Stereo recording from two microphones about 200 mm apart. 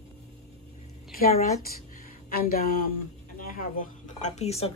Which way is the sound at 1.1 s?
50° left (ahead or behind).